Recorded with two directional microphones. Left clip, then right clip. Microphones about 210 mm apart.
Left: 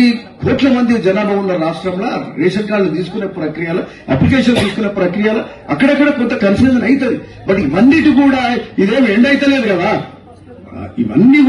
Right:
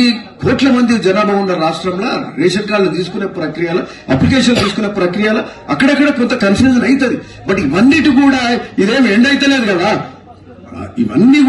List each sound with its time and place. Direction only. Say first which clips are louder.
0.0 s a man's voice: right 1 dB; 55° right (ahead or behind)
11.1 s a man's voice: even; 55° right (ahead or behind)